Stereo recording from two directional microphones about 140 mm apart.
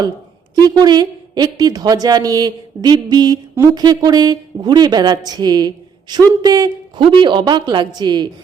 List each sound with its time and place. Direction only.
0.8 s a woman's voice: 30° right (ahead or behind)